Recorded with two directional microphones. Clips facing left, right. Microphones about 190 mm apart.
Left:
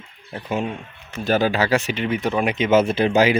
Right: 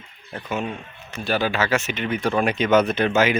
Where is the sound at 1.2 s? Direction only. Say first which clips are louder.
Left 3 dB; 40° left (ahead or behind).